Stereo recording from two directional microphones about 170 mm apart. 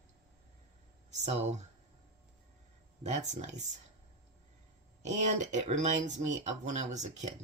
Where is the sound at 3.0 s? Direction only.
40° right (ahead or behind).